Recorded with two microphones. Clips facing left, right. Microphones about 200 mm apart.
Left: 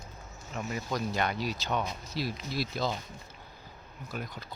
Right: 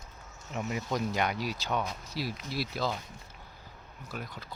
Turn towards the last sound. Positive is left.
turn(degrees=-5)  # may be behind; listen again after turning